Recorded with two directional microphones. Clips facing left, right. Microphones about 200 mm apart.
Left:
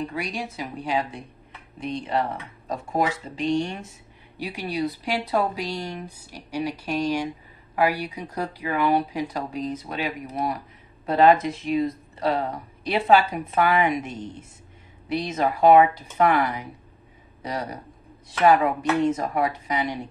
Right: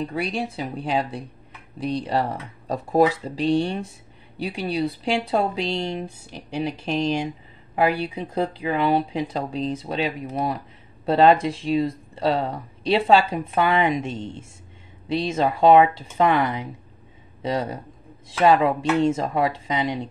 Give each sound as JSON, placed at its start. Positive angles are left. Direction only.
{"t": 0.4, "sound": "speech", "side_deg": -30}
{"t": 3.3, "sound": "speech", "side_deg": -35}